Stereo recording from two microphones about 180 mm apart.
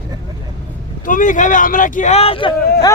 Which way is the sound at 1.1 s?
45° left (ahead or behind).